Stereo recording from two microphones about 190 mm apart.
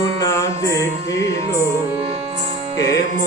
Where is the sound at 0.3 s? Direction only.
15° left (ahead or behind).